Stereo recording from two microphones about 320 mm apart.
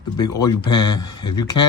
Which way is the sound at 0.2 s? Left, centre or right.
Centre.